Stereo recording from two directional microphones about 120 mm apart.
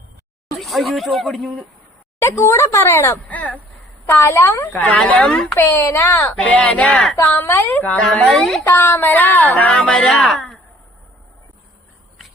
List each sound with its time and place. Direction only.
0.4 s speech: centre (ahead or behind)
2.2 s speech: 25° left (ahead or behind); by 5.5 s 5° left (ahead or behind)
5.5 s speech: 20° left (ahead or behind)
7.4 s a woman's voice: 15° left (ahead or behind)
8.7 s speech: 20° left (ahead or behind)
10.2 s a sound: centre (ahead or behind)